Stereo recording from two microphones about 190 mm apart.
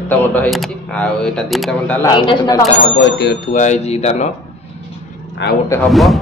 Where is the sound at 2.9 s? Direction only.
65° left (ahead or behind).